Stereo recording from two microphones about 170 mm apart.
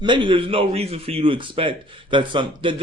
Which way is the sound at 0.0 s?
30° right (ahead or behind).